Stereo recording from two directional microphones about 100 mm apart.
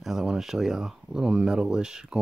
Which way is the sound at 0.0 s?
5° right (ahead or behind).